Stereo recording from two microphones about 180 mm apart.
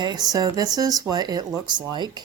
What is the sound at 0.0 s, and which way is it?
Speech, 25° right (ahead or behind).